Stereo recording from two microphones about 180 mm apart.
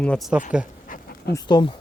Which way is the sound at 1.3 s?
25° left (ahead or behind).